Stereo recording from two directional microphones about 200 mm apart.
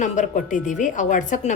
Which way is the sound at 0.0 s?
40° left (ahead or behind).